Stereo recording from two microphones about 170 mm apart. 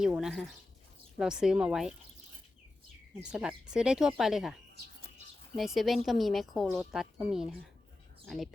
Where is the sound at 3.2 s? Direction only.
5° right (ahead or behind).